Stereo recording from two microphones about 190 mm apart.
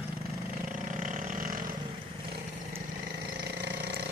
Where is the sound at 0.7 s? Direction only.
40° right (ahead or behind).